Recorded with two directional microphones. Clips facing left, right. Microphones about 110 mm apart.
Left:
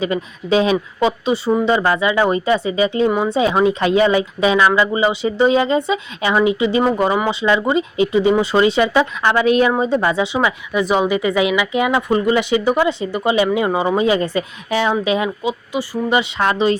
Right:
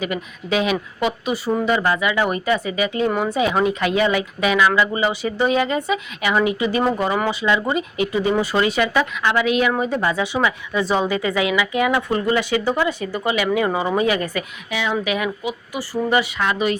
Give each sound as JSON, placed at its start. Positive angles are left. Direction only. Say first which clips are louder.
{"t": 0.0, "sound": "speech", "louder": "left 5 dB", "side_deg": 30}
{"t": 9.2, "sound": "a woman's voice", "louder": "left 4 dB", "side_deg": 35}
{"t": 9.7, "sound": "speech", "louder": "left 4 dB", "side_deg": 25}
{"t": 14.7, "sound": "a woman's voice", "louder": "left 6 dB", "side_deg": 40}
{"t": 15.0, "sound": "speech", "louder": "left 4 dB", "side_deg": 25}
{"t": 16.4, "sound": "a woman's voice", "louder": "left 4 dB", "side_deg": 35}